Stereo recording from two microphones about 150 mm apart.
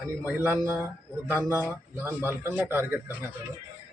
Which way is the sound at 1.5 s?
20° left (ahead or behind).